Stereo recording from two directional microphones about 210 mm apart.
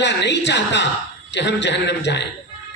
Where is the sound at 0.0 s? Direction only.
55° left (ahead or behind).